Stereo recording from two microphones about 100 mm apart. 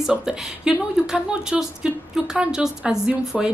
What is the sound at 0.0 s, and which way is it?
A woman's voice, 5° right (ahead or behind).